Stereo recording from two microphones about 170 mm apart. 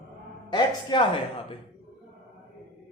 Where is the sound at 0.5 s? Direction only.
25° left (ahead or behind).